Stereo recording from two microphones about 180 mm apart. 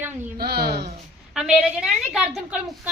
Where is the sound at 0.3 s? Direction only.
60° right (ahead or behind).